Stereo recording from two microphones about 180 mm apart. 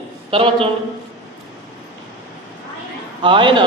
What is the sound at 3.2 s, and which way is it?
Speech, 25° right (ahead or behind).